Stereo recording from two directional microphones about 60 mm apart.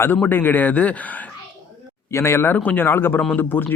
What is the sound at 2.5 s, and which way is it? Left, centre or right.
Speech, left.